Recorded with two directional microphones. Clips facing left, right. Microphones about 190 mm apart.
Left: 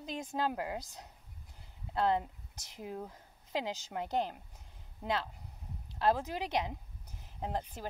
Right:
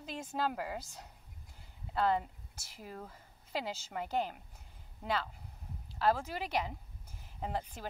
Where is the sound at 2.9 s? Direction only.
15° left (ahead or behind).